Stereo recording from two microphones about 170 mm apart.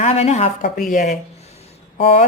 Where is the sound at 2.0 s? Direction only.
35° left (ahead or behind).